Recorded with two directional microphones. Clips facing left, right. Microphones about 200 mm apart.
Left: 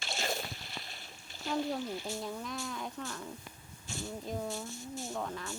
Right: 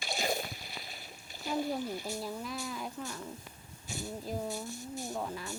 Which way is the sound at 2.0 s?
40° right (ahead or behind).